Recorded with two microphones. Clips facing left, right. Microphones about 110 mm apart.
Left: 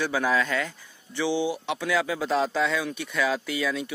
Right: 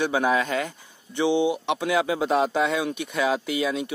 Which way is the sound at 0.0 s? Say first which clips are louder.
Right 2 dB; 20° right (ahead or behind).